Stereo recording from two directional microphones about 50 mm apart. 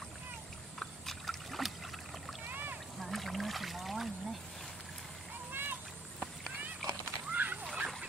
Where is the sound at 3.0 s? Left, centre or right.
Centre.